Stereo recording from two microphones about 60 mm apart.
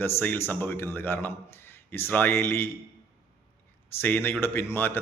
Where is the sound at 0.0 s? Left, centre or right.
Left.